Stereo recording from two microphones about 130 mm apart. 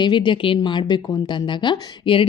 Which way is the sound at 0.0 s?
35° left (ahead or behind).